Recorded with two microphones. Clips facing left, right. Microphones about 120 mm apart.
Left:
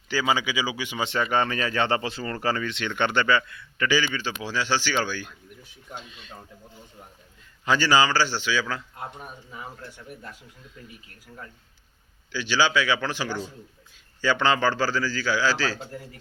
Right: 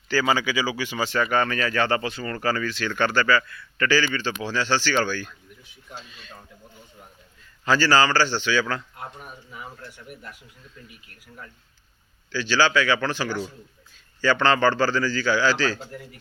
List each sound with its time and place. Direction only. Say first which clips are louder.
0.1 s speech: right 2 dB; 15° left (ahead or behind)
7.6 s a man's voice: right 1 dB; 15° left (ahead or behind)
9.0 s speech: left 1 dB; 20° left (ahead or behind)
12.3 s a man's voice: right 2 dB; 15° left (ahead or behind)
15.8 s speech: even; 25° left (ahead or behind)